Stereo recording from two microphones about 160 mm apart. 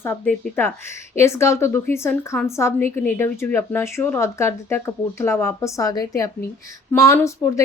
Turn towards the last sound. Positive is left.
turn(degrees=15)  # may be behind; listen again after turning